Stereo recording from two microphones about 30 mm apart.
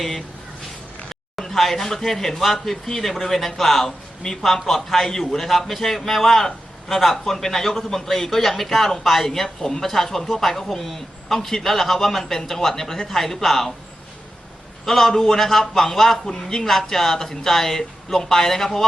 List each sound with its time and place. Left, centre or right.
1.5 s a man's voice: centre
11.3 s speech: centre
11.6 s a man's voice: centre
14.8 s a man's voice: centre
16.3 s speech: centre
16.6 s a man's voice: centre